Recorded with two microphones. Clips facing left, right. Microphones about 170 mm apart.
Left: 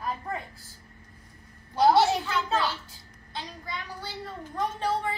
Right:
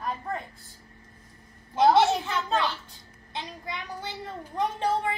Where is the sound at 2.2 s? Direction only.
20° right (ahead or behind).